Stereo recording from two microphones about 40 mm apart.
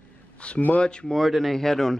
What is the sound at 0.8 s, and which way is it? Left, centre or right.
Speech, left.